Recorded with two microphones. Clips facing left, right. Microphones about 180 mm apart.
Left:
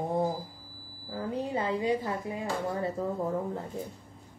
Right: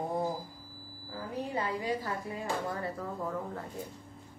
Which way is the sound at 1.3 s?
25° left (ahead or behind).